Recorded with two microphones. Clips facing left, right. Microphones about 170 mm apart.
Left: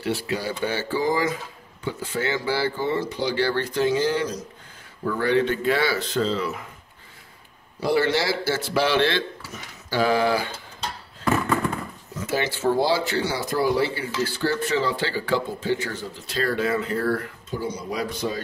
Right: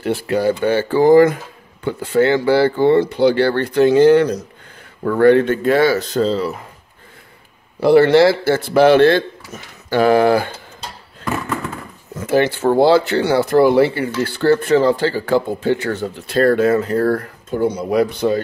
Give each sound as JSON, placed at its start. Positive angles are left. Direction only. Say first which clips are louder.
{"t": 0.0, "sound": "speech", "louder": "right 9 dB", "side_deg": -55}
{"t": 7.8, "sound": "speech", "louder": "right 12 dB", "side_deg": -60}
{"t": 12.2, "sound": "speech", "louder": "right 9 dB", "side_deg": -55}